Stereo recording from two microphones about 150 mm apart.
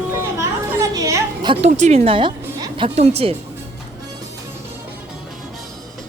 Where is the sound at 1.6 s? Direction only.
45° right (ahead or behind).